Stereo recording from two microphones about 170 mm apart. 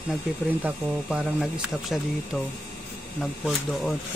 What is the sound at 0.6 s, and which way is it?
Speech, centre (ahead or behind).